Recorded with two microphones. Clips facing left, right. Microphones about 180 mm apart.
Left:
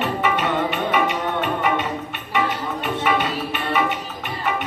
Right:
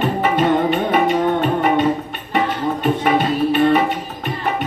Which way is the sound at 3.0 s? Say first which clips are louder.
Right 5 dB; 40° right (ahead or behind).